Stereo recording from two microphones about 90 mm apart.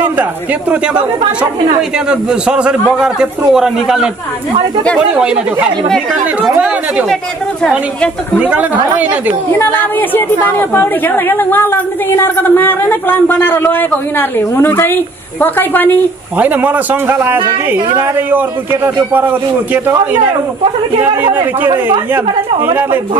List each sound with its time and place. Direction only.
0.0 s speech: 20° right (ahead or behind)
1.8 s a man's voice: 10° right (ahead or behind)
5.1 s a man's voice: 10° right (ahead or behind)
5.9 s speech: 5° left (ahead or behind)
6.5 s a man's voice: 15° right (ahead or behind)
8.4 s a man's voice: 15° right (ahead or behind)
9.6 s a woman's voice: 20° left (ahead or behind)
16.3 s a man's voice: 20° right (ahead or behind)
21.6 s a man's voice: 25° right (ahead or behind)